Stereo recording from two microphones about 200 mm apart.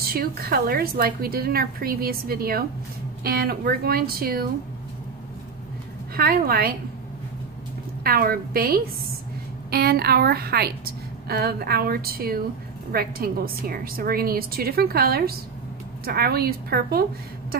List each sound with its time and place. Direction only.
0.0 s a woman's voice: 50° right (ahead or behind)
6.1 s a woman's voice: 50° right (ahead or behind)
8.0 s a woman's voice: 50° right (ahead or behind)